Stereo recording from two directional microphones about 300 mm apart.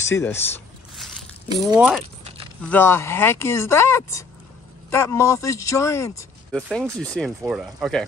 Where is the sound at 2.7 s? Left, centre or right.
Centre.